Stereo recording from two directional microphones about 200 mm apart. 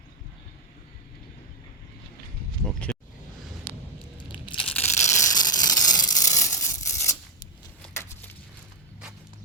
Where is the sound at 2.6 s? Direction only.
5° left (ahead or behind).